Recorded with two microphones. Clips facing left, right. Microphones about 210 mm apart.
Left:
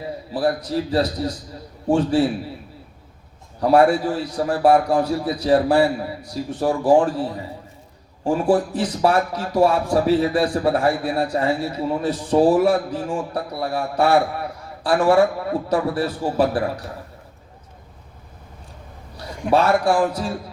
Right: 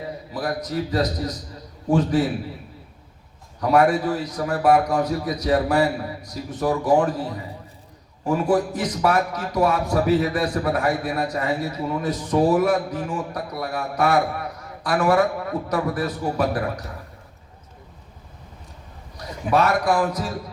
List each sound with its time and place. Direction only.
0.3 s a man's voice: 30° left (ahead or behind)
3.6 s a man's voice: 30° left (ahead or behind)
8.2 s a man's voice: 30° left (ahead or behind)
19.1 s a man's voice: 30° left (ahead or behind)